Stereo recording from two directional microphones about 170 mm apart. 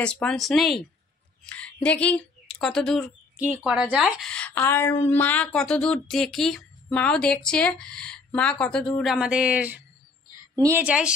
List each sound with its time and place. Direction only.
0.0 s a woman's voice: 5° left (ahead or behind)